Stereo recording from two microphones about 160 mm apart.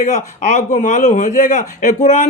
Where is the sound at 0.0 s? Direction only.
55° left (ahead or behind).